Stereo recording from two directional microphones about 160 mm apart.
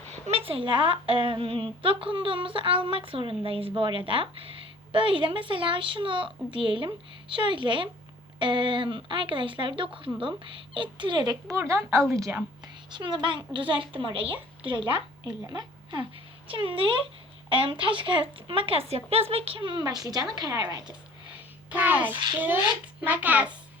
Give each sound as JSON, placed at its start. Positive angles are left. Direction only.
{"t": 0.3, "sound": "a woman's voice", "side_deg": -35}
{"t": 12.9, "sound": "a woman's voice", "side_deg": -30}
{"t": 21.7, "sound": "a child's voice", "side_deg": -10}